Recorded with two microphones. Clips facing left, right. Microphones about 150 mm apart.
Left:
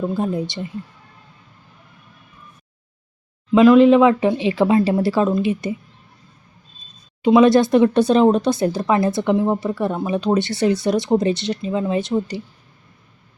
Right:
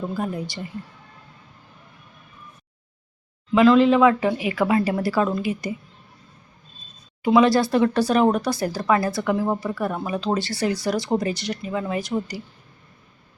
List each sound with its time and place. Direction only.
0.1 s speech: 25° left (ahead or behind)
3.5 s speech: 20° left (ahead or behind)
7.2 s speech: 20° left (ahead or behind)